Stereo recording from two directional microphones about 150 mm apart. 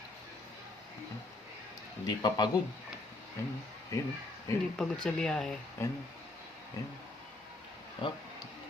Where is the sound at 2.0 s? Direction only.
25° left (ahead or behind).